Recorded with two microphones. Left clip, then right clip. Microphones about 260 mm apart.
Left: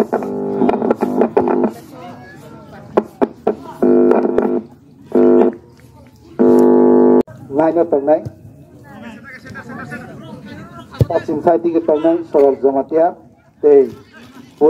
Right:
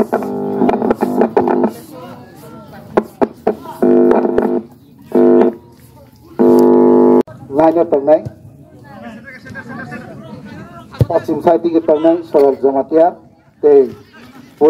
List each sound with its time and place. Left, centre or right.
0.0 s music: right
6.3 s a sound: right
7.5 s speech: right
9.0 s chatter: left
10.9 s a sound: centre
11.2 s speech: right